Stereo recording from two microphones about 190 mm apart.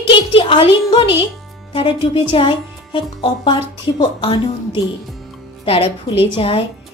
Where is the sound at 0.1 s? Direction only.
25° left (ahead or behind).